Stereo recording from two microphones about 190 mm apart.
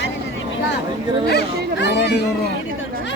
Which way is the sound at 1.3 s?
60° left (ahead or behind).